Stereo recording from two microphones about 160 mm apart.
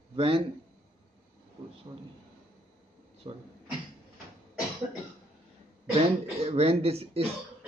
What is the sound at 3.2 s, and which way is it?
Speech, 35° right (ahead or behind).